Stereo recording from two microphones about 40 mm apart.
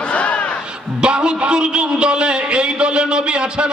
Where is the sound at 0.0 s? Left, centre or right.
Left.